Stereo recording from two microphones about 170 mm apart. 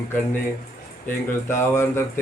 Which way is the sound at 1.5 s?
15° left (ahead or behind).